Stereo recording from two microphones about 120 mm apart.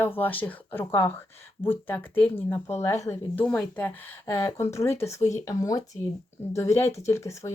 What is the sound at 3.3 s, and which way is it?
Speech, 10° left (ahead or behind).